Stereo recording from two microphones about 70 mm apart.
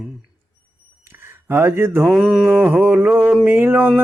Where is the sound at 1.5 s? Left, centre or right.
Right.